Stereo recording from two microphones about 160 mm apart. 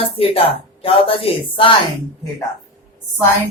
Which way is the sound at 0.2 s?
35° left (ahead or behind).